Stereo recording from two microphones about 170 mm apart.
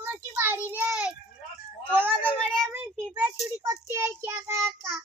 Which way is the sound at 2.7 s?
10° right (ahead or behind).